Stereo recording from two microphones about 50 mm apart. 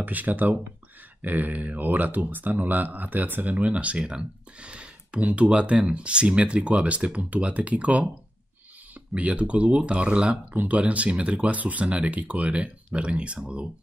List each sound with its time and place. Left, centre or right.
0.0 s speech: right
9.1 s speech: right